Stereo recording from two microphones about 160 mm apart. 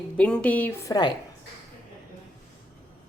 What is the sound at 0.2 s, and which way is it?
Speech, 5° left (ahead or behind).